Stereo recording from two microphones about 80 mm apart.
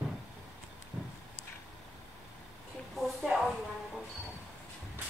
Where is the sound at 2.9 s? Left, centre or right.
Centre.